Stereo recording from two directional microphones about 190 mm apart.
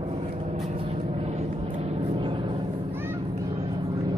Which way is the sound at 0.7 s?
30° right (ahead or behind).